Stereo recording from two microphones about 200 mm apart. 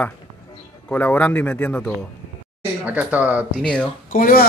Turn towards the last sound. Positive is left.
turn(degrees=45)  # may be behind; listen again after turning